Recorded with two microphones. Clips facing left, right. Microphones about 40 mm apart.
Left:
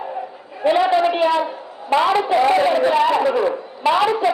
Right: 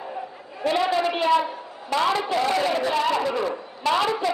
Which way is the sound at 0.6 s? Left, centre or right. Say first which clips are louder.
Left 6 dB; centre.